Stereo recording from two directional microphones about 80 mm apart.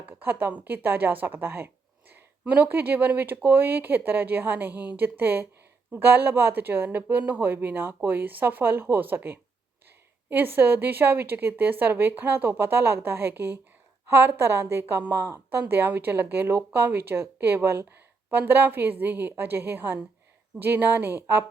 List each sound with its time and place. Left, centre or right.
0.2 s a woman's voice: right